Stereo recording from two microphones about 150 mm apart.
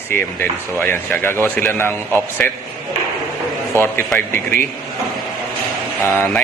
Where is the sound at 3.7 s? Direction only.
15° left (ahead or behind).